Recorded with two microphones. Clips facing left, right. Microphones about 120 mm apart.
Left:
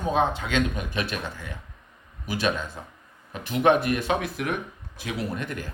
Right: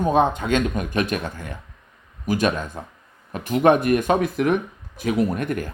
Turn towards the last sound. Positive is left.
turn(degrees=-50)  # may be behind; listen again after turning